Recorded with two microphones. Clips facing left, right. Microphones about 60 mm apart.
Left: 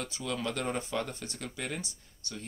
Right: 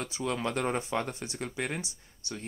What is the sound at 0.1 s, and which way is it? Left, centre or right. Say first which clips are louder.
Speech: right 3 dB; right.